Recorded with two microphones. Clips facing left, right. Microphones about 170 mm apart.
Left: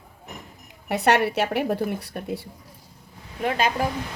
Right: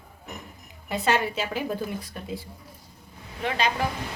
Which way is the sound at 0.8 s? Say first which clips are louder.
Left 4 dB; 70° left (ahead or behind).